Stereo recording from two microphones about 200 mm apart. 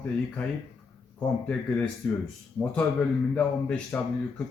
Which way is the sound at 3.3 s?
5° left (ahead or behind).